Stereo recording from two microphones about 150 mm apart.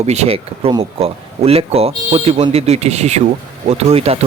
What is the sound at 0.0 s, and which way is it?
Speech, 45° right (ahead or behind).